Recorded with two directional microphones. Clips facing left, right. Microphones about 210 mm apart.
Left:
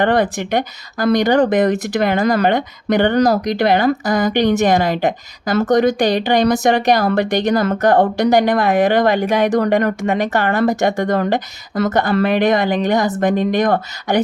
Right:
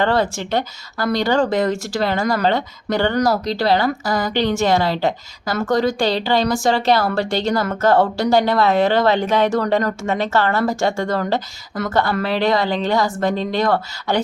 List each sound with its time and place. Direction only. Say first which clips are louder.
0.0 s a woman's voice: left 3 dB; 20° left (ahead or behind)